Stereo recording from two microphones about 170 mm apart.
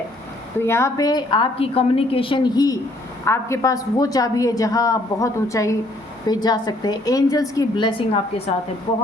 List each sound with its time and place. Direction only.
0.6 s a woman's voice: 15° left (ahead or behind); by 8.2 s 30° left (ahead or behind)